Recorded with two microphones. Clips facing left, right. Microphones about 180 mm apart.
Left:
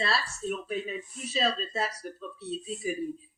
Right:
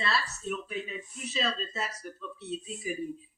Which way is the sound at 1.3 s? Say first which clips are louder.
Left 4 dB; 35° left (ahead or behind).